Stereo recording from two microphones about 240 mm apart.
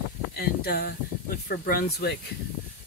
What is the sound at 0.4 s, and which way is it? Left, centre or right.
Speech, left.